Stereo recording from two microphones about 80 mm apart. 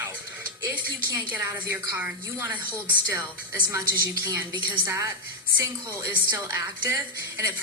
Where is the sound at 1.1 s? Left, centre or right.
Right.